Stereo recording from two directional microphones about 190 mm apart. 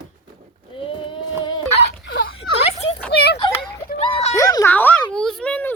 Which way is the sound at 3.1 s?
60° left (ahead or behind).